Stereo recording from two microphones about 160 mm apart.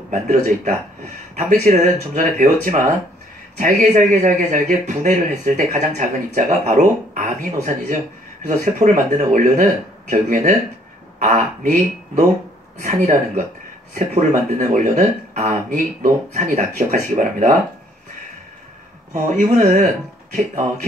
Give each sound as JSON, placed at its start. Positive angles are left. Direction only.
{"t": 0.1, "sound": "speech", "side_deg": -50}
{"t": 19.3, "sound": "speech", "side_deg": -50}